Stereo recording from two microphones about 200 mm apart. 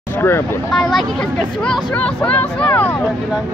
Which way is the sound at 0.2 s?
10° left (ahead or behind).